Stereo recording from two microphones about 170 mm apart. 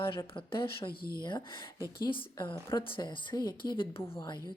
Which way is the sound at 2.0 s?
30° left (ahead or behind).